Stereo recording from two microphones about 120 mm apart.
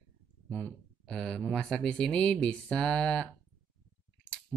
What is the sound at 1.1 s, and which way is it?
Speech, 5° left (ahead or behind).